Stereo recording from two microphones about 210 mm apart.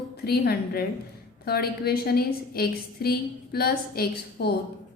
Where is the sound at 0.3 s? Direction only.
50° left (ahead or behind).